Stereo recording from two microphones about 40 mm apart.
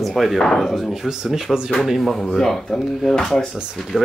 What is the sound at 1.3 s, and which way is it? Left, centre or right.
Speech, centre.